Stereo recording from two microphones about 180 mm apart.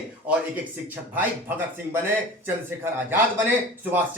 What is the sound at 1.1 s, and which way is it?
A man's voice, 10° right (ahead or behind).